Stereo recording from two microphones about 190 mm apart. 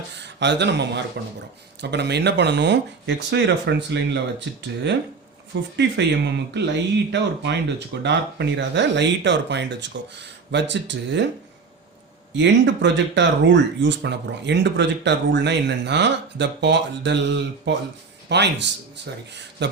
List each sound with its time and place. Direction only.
0.2 s speech: 65° right (ahead or behind)
12.4 s speech: 70° right (ahead or behind)